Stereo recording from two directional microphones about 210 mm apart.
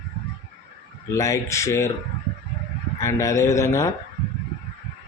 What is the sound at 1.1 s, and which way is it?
Speech, 15° left (ahead or behind).